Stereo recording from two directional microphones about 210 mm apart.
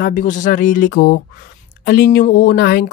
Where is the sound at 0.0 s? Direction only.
40° left (ahead or behind).